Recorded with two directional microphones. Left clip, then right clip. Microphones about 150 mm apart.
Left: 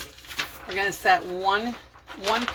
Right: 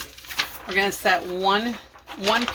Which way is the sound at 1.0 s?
45° right (ahead or behind).